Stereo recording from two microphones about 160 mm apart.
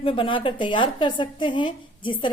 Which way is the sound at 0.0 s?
30° left (ahead or behind).